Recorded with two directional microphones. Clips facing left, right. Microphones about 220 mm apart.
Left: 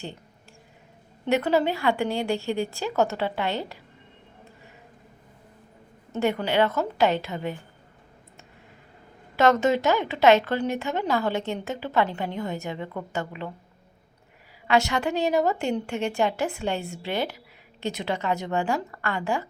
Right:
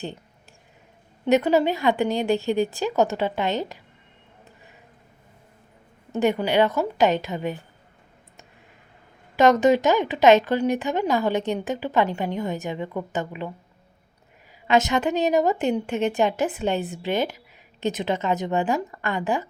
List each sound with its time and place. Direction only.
1.2 s a woman's voice: 15° right (ahead or behind)
6.1 s a woman's voice: 15° right (ahead or behind)
9.3 s a woman's voice: 15° right (ahead or behind)
14.7 s a woman's voice: 20° right (ahead or behind)